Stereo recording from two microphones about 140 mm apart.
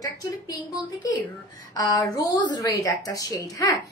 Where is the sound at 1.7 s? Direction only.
25° left (ahead or behind).